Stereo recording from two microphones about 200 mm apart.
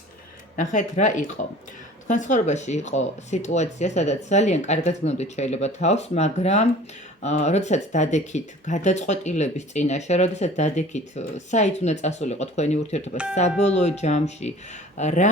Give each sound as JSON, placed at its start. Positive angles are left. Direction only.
{"t": 0.5, "sound": "speech", "side_deg": 40}
{"t": 13.2, "sound": "speech", "side_deg": -5}
{"t": 13.6, "sound": "speech", "side_deg": 35}